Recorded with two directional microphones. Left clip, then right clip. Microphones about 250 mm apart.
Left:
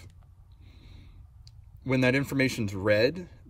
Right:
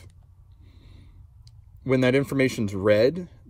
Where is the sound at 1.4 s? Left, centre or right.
Centre.